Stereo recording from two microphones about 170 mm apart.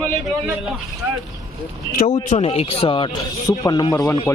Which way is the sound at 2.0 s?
40° left (ahead or behind).